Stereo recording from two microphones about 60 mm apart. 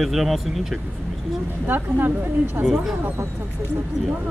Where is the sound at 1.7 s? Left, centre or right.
Right.